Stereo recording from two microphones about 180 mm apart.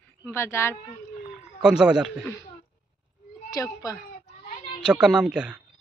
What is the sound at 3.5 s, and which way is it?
Speech, 20° left (ahead or behind).